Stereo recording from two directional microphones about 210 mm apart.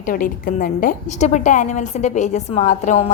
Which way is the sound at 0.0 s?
40° left (ahead or behind).